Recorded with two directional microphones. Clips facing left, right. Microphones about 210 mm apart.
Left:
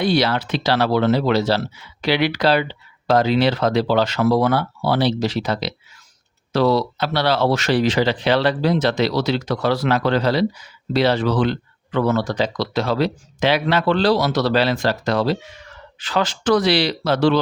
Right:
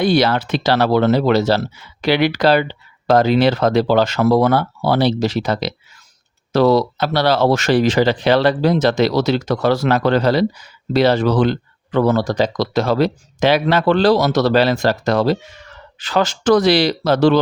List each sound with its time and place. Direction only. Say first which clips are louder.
0.0 s speech: right 3 dB; 45° right (ahead or behind)